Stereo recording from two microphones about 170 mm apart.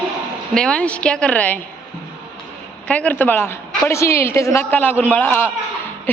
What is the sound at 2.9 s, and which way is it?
A woman's voice, 10° left (ahead or behind).